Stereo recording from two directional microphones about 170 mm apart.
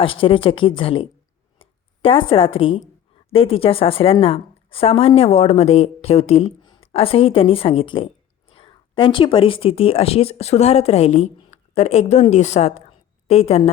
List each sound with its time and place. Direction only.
0.0 s a woman's voice: 30° left (ahead or behind)